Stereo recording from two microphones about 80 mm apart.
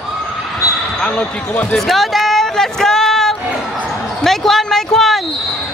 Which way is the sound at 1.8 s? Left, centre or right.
Centre.